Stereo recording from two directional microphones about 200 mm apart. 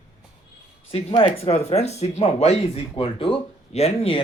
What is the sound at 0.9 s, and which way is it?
Speech, 25° left (ahead or behind).